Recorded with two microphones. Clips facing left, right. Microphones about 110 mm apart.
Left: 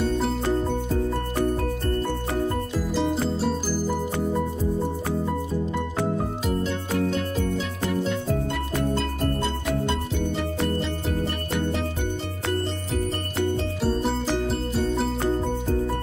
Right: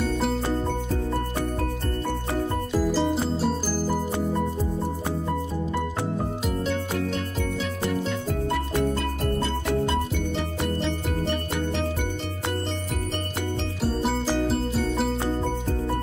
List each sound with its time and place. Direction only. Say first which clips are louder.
2.9 s music: left 3 dB; centre (ahead or behind)
13.8 s music: even; centre (ahead or behind)